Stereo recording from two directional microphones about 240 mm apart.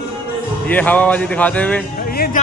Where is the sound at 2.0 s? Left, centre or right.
Left.